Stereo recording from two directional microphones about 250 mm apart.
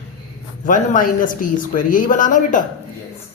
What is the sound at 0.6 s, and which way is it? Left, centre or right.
Speech, left.